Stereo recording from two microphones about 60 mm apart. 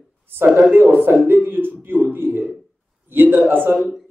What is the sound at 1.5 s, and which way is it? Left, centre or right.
Speech, right.